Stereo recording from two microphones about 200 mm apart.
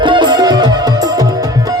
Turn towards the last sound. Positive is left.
turn(degrees=-20)  # may be behind; listen again after turning